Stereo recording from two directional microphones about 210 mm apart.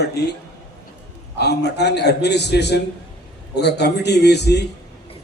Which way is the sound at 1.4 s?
50° left (ahead or behind).